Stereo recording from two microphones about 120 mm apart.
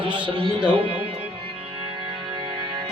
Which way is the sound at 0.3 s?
50° right (ahead or behind).